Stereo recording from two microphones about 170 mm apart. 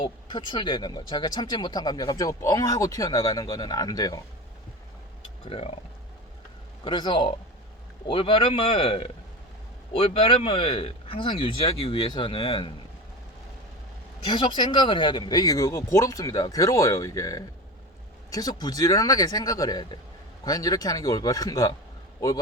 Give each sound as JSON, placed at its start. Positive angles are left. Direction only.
{"t": 0.3, "sound": "speech", "side_deg": 25}
{"t": 5.5, "sound": "speech", "side_deg": 35}
{"t": 6.8, "sound": "speech", "side_deg": 25}
{"t": 14.3, "sound": "speech", "side_deg": 30}